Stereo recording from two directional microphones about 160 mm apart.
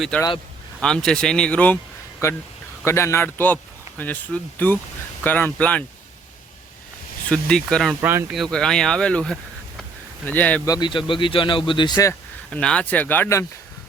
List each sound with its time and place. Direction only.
0.8 s speech: 5° left (ahead or behind)
2.2 s speech: 20° left (ahead or behind)
7.3 s speech: 5° left (ahead or behind)
10.7 s speech: 30° left (ahead or behind)
12.5 s speech: 5° left (ahead or behind)